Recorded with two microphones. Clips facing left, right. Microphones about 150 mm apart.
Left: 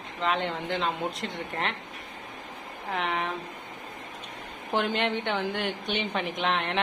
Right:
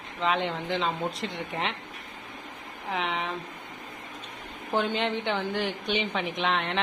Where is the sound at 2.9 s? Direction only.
Centre (ahead or behind).